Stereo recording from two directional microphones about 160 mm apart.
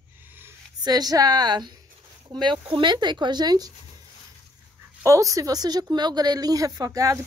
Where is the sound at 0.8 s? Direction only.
25° right (ahead or behind).